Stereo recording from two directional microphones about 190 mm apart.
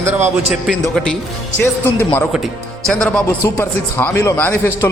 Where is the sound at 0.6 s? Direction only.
Centre (ahead or behind).